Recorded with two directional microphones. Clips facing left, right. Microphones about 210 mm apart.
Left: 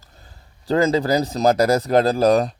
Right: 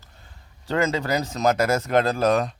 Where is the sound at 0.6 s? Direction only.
35° left (ahead or behind).